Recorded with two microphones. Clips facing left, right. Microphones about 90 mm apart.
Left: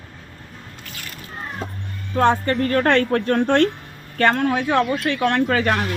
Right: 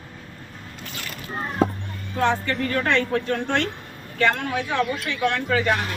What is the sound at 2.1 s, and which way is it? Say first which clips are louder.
A woman's voice: left 5 dB; 45° left (ahead or behind).